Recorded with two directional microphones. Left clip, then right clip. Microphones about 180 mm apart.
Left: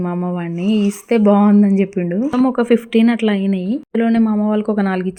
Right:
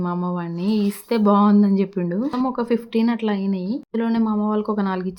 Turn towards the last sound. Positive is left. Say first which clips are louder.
# left 5 dB
turn(degrees=20)  # may be behind; listen again after turning